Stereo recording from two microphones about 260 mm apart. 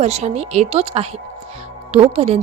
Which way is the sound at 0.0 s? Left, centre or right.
Right.